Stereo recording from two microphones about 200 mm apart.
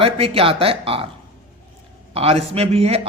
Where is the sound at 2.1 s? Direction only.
30° right (ahead or behind).